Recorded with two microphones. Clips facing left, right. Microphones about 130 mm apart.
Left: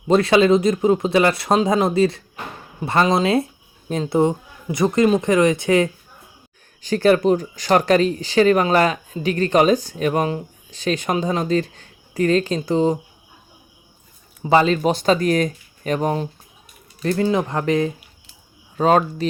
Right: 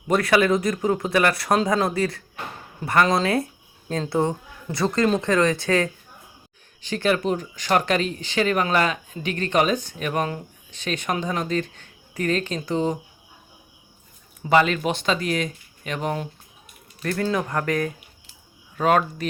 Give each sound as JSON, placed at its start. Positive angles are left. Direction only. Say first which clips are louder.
{"t": 0.1, "sound": "speech", "louder": "left 5 dB", "side_deg": 25}
{"t": 6.8, "sound": "speech", "louder": "left 7 dB", "side_deg": 40}
{"t": 14.5, "sound": "speech", "louder": "left 3 dB", "side_deg": 30}
{"t": 17.0, "sound": "speech", "louder": "left 5 dB", "side_deg": 25}